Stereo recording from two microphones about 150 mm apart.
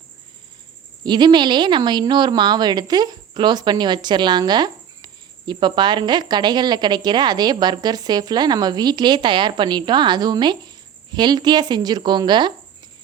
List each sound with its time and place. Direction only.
1.0 s a woman's voice: 30° right (ahead or behind)